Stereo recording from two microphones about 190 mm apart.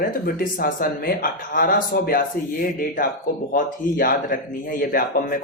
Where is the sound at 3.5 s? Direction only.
45° left (ahead or behind).